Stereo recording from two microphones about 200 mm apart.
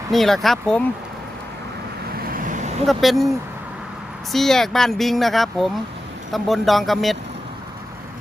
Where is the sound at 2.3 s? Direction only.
40° right (ahead or behind).